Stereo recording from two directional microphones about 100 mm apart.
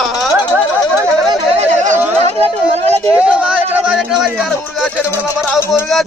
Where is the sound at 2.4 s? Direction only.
90° right.